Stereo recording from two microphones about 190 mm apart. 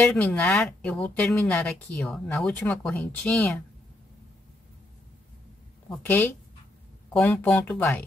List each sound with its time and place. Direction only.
0.0 s speech: 5° left (ahead or behind)
5.9 s speech: 10° left (ahead or behind)